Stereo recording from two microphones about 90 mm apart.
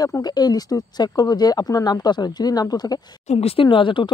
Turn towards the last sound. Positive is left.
turn(degrees=65)  # may be behind; listen again after turning